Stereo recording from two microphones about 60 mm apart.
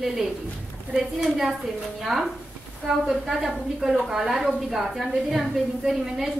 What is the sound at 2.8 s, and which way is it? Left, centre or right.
A woman's voice, centre.